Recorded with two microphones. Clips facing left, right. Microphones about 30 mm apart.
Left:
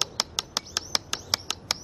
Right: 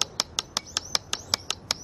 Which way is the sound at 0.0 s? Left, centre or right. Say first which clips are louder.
Even; centre.